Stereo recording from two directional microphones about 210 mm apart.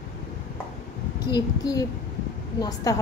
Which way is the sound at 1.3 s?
15° left (ahead or behind).